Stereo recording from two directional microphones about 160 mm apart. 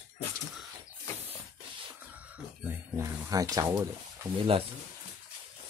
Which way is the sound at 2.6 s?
15° right (ahead or behind).